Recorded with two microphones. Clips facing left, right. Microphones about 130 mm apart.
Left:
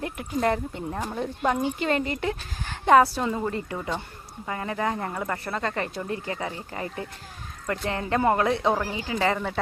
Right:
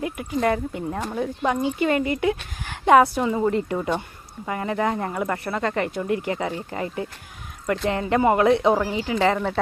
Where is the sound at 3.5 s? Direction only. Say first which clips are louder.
Right 6 dB; 20° right (ahead or behind).